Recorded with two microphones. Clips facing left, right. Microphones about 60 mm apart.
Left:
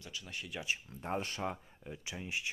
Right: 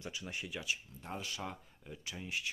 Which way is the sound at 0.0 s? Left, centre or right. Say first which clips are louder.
Right 2 dB; right.